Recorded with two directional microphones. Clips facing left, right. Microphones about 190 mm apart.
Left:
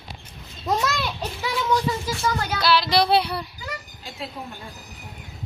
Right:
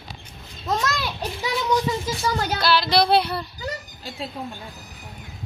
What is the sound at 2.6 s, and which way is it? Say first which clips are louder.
Speech: even; 5° left (ahead or behind).